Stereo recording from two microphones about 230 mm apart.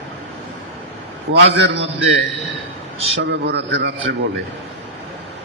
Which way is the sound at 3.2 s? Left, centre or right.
Right.